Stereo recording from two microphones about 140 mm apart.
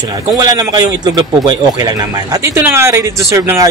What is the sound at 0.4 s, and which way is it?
A man's voice, 25° right (ahead or behind).